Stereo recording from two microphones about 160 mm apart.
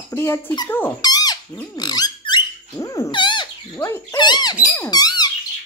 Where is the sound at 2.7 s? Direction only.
20° left (ahead or behind).